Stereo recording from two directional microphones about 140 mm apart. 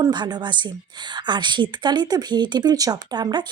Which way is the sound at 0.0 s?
30° right (ahead or behind).